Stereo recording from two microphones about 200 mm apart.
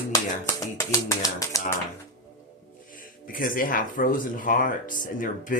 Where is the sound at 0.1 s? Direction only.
15° left (ahead or behind).